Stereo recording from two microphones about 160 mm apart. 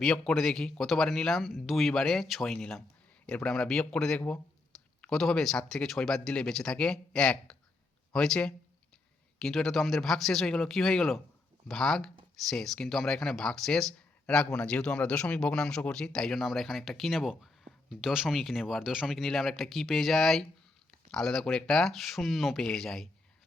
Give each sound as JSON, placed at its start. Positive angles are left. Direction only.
{"t": 0.0, "sound": "speech", "side_deg": 0}